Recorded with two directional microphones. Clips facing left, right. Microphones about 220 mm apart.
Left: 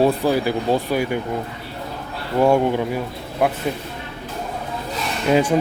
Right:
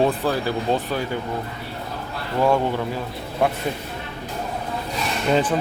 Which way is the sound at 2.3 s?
15° left (ahead or behind).